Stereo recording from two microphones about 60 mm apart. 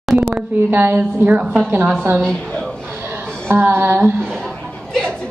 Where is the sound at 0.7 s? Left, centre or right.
Right.